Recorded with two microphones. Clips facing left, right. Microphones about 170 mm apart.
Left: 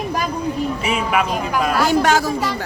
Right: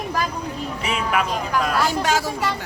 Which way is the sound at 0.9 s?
5° left (ahead or behind).